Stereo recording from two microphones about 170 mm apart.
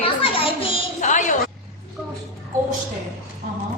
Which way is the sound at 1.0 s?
45° left (ahead or behind).